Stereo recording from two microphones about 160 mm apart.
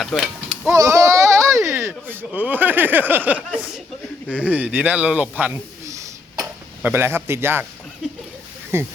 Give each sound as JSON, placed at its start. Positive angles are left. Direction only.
{"t": 0.0, "sound": "a sound", "side_deg": 0}
{"t": 0.7, "sound": "speech", "side_deg": -20}
{"t": 8.7, "sound": "speech", "side_deg": -15}